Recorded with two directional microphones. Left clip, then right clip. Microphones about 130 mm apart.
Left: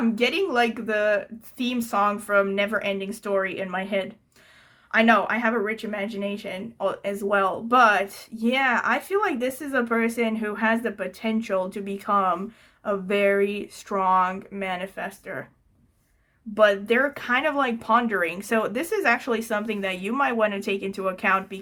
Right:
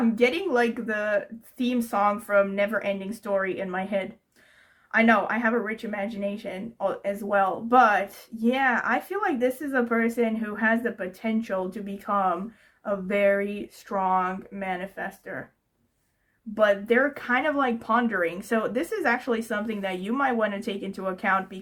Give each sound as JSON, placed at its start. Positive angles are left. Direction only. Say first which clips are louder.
{"t": 0.2, "sound": "speech", "louder": "left 1 dB", "side_deg": 35}
{"t": 16.6, "sound": "speech", "louder": "left 2 dB", "side_deg": 35}